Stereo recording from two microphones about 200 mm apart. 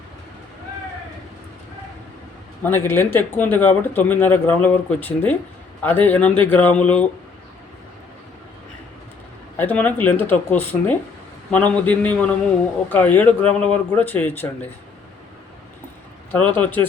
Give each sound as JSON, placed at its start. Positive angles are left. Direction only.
{"t": 2.6, "sound": "speech", "side_deg": 10}
{"t": 9.6, "sound": "speech", "side_deg": 10}
{"t": 16.3, "sound": "speech", "side_deg": 10}